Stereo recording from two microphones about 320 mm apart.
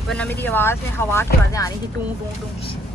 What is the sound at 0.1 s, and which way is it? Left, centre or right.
Speech, centre.